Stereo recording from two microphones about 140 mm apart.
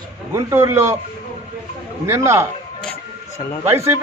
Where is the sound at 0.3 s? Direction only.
20° right (ahead or behind).